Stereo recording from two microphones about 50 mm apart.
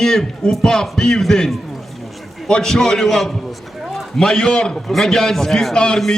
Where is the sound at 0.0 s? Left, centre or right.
Centre.